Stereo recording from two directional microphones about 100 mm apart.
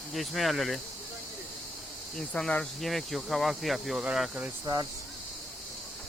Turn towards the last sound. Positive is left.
turn(degrees=-40)  # may be behind; listen again after turning